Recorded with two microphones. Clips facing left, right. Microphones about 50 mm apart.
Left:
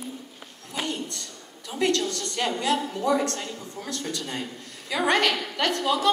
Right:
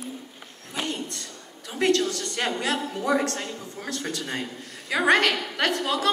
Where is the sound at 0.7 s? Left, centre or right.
Centre.